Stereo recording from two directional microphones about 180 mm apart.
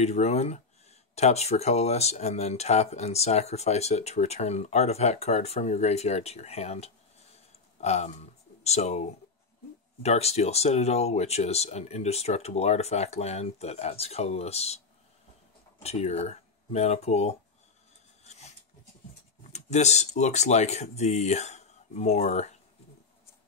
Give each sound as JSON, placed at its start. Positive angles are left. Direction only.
{"t": 0.0, "sound": "speech", "side_deg": 35}
{"t": 7.3, "sound": "a sound", "side_deg": 40}
{"t": 10.0, "sound": "speech", "side_deg": 35}
{"t": 15.8, "sound": "speech", "side_deg": 35}
{"t": 19.5, "sound": "speech", "side_deg": 40}